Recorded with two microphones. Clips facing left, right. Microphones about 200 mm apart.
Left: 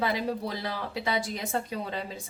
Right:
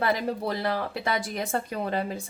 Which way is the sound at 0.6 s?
55° right (ahead or behind).